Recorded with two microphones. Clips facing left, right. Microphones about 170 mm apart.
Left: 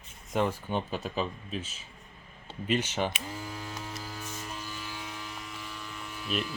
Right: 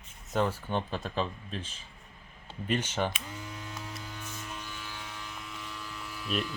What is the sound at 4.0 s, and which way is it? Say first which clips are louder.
Music: left 2 dB; 35° left (ahead or behind).